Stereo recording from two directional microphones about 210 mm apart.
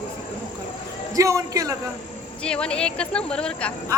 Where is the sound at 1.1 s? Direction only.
15° right (ahead or behind).